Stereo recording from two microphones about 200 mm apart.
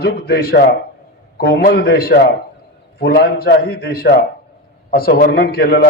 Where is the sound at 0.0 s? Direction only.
50° left (ahead or behind).